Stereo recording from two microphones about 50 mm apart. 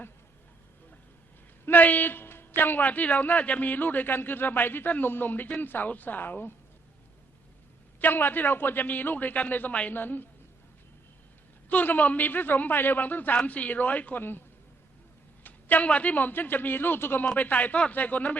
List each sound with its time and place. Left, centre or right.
1.6 s a man's voice: left
8.0 s a man's voice: left
11.7 s a man's voice: left
14.2 s a man's voice: left
15.4 s a sound: left
15.9 s a man's voice: left
17.3 s a man's voice: left